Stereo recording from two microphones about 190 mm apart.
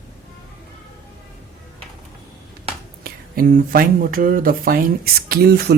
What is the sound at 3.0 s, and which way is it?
Speech, 50° right (ahead or behind).